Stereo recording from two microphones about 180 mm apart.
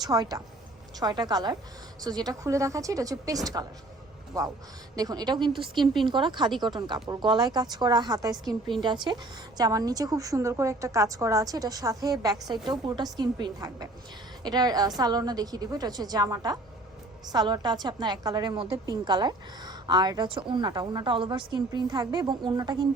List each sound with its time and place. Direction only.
0.0 s a woman's voice: 20° right (ahead or behind)
4.9 s a woman's voice: 20° right (ahead or behind)
5.8 s speech: centre (ahead or behind)
6.1 s a woman's voice: 25° right (ahead or behind)